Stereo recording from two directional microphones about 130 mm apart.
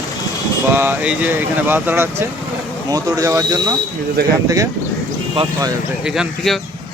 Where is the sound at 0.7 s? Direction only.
15° right (ahead or behind).